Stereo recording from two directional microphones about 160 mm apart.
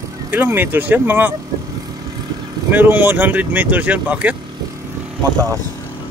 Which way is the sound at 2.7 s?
10° right (ahead or behind).